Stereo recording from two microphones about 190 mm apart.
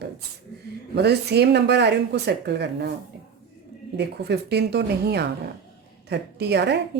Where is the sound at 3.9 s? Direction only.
60° right (ahead or behind).